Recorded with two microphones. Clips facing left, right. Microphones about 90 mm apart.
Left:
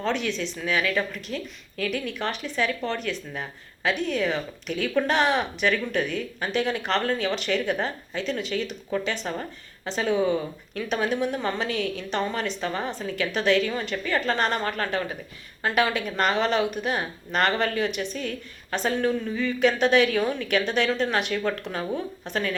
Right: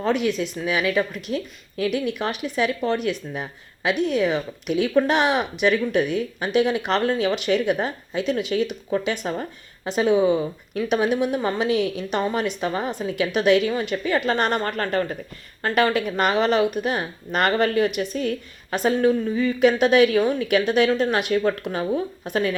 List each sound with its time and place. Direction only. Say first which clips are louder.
0.0 s a woman's voice: right 5 dB; 10° right (ahead or behind)
14.3 s a woman's voice: right 3 dB; 5° right (ahead or behind)